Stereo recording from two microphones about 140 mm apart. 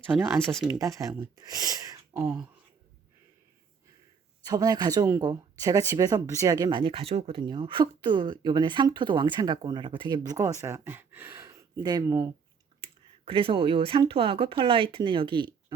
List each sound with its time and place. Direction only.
0.0 s speech: 15° right (ahead or behind)
0.4 s speech: 5° left (ahead or behind)
0.7 s speech: 25° right (ahead or behind)
4.4 s speech: 25° right (ahead or behind)
12.8 s speech: 40° right (ahead or behind)